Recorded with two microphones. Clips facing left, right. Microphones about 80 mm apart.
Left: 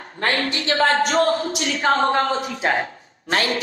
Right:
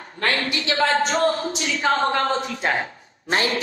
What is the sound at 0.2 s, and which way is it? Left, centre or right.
A woman's voice, left.